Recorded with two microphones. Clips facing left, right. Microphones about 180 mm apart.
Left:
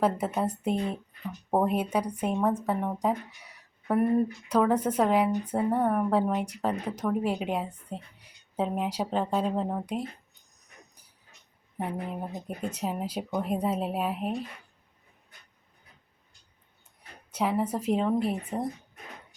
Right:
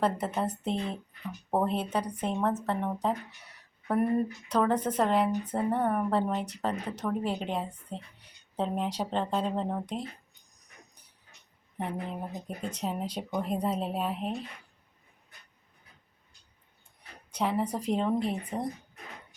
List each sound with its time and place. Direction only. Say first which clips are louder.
0.0 s speech: left 2 dB; 10° left (ahead or behind)
11.8 s speech: left 2 dB; 5° left (ahead or behind)
17.3 s speech: left 2 dB; 5° left (ahead or behind)